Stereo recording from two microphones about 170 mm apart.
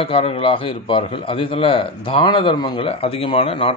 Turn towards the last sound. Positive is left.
turn(degrees=35)  # may be behind; listen again after turning